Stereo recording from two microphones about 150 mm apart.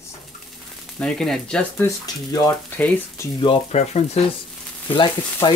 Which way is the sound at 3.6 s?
45° left (ahead or behind).